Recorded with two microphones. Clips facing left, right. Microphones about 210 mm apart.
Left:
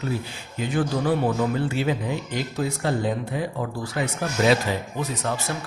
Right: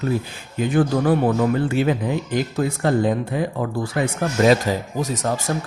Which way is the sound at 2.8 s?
50° right (ahead or behind).